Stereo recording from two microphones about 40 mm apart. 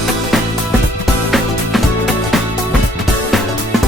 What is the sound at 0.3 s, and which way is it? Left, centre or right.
Music, centre.